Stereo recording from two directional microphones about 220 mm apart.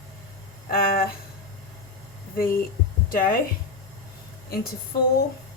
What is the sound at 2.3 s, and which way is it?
A woman's voice, 40° left (ahead or behind).